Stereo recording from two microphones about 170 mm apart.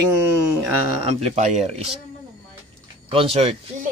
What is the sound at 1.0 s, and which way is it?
Speech, 40° right (ahead or behind).